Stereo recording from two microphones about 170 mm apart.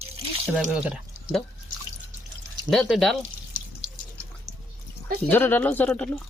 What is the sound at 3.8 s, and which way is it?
Water, 5° right (ahead or behind).